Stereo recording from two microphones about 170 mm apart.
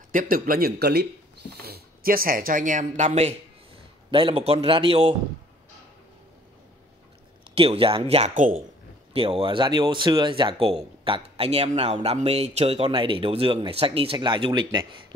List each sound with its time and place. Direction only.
0.1 s speech: 55° right (ahead or behind)
4.1 s speech: 30° right (ahead or behind)
7.5 s speech: 35° right (ahead or behind)